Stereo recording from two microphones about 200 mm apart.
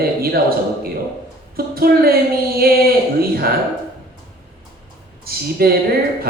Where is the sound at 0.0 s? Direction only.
50° right (ahead or behind).